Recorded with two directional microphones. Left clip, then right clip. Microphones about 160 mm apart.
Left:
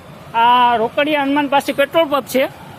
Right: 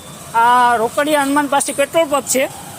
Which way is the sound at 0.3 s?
15° left (ahead or behind).